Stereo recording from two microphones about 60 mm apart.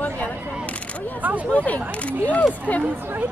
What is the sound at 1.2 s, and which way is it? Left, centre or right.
Speech, right.